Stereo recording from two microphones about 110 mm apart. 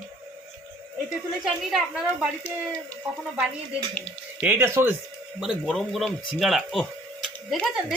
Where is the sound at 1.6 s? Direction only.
Centre (ahead or behind).